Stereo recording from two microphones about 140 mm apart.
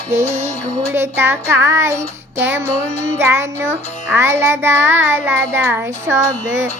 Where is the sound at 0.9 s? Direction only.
15° right (ahead or behind).